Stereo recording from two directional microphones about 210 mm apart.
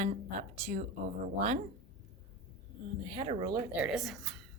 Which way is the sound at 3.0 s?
25° right (ahead or behind).